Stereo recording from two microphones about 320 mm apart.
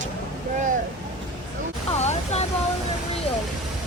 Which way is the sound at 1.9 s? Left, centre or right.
Centre.